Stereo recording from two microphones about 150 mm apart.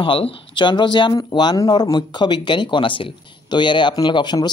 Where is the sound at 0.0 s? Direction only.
35° left (ahead or behind).